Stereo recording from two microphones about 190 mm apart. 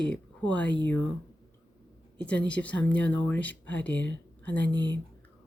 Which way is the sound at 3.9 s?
75° left (ahead or behind).